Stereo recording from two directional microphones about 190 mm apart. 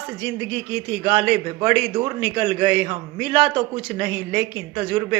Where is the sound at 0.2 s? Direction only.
10° right (ahead or behind).